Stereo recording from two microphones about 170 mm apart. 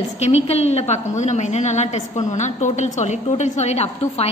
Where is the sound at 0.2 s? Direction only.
40° left (ahead or behind).